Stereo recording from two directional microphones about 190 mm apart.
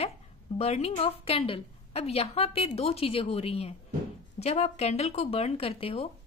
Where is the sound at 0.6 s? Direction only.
35° left (ahead or behind).